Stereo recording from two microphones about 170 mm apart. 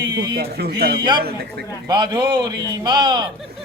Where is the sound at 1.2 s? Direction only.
65° right (ahead or behind).